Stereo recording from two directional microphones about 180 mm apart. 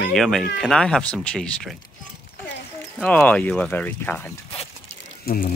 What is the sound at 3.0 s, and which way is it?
Speech, 10° left (ahead or behind).